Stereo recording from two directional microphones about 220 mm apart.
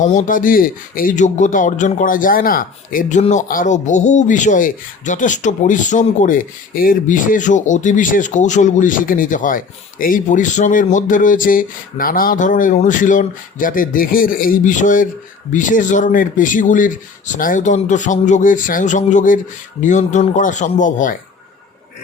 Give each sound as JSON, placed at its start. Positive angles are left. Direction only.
{"t": 0.0, "sound": "speech", "side_deg": 35}